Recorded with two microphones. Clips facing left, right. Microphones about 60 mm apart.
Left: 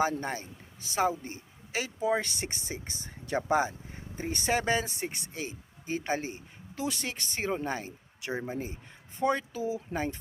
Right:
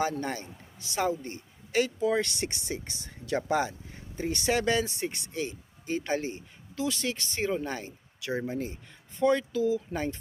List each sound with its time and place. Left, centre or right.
0.0 s speech: left